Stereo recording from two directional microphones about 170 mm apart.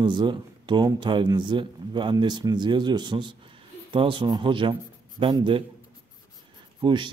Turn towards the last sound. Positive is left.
turn(degrees=-25)  # may be behind; listen again after turning